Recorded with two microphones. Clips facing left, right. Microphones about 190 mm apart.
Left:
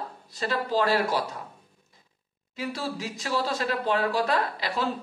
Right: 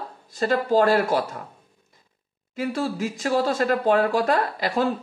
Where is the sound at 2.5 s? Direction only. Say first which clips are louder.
Right 6 dB; 50° right (ahead or behind).